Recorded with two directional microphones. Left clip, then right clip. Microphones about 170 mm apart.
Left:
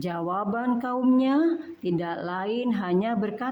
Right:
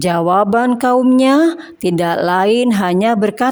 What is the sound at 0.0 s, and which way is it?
A woman's voice, 45° right (ahead or behind).